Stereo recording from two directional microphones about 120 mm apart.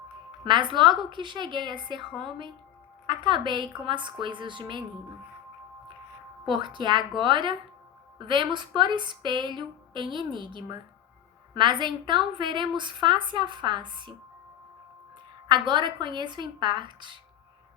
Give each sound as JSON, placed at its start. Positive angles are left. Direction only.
{"t": 0.4, "sound": "a woman's voice", "side_deg": -40}
{"t": 3.1, "sound": "a woman's voice", "side_deg": -40}
{"t": 6.5, "sound": "a woman's voice", "side_deg": -40}
{"t": 15.4, "sound": "a woman's voice", "side_deg": -40}